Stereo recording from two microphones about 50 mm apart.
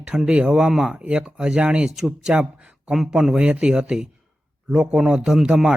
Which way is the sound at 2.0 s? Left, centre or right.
Centre.